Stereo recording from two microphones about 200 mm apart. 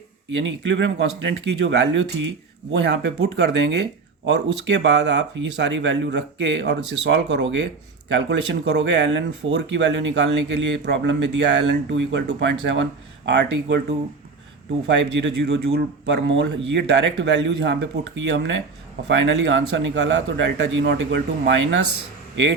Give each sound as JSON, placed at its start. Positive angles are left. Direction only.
{"t": 0.3, "sound": "speech", "side_deg": -65}
{"t": 14.8, "sound": "speech", "side_deg": -60}